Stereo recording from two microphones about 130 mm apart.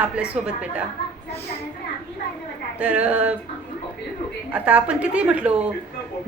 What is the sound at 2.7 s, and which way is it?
Speech, 10° right (ahead or behind).